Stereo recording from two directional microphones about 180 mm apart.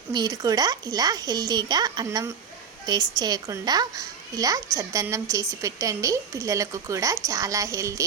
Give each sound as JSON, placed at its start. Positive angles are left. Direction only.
{"t": 0.1, "sound": "a child's voice", "side_deg": -20}